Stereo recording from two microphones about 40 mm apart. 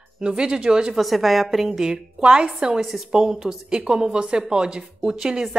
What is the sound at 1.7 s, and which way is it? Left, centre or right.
Speech, centre.